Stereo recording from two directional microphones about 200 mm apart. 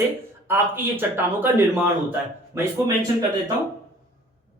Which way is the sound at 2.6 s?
15° right (ahead or behind).